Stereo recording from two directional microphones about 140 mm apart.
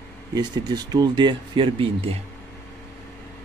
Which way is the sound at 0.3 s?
30° right (ahead or behind).